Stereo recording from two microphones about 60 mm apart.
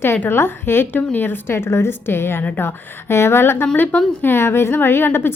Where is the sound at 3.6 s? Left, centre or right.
Left.